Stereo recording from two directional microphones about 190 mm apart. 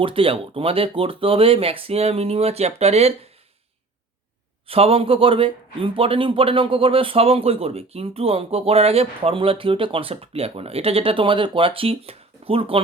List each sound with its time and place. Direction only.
0.0 s a man's voice: 30° right (ahead or behind)
4.6 s a man's voice: 30° right (ahead or behind)